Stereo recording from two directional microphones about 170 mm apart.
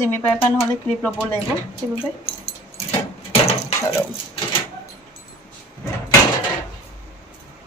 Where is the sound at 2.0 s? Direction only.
35° left (ahead or behind).